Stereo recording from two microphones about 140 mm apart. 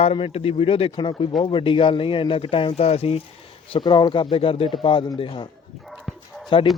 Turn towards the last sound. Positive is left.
turn(degrees=35)  # may be behind; listen again after turning